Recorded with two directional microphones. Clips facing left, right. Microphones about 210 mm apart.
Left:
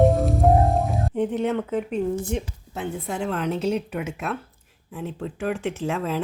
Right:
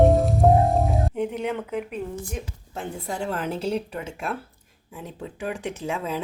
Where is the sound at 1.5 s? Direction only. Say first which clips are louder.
Left 4 dB; 10° right (ahead or behind).